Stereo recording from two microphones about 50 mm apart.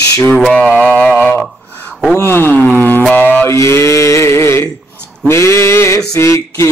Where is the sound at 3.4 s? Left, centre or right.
Left.